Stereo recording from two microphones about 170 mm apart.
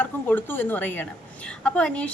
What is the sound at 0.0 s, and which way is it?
Speech, 10° left (ahead or behind).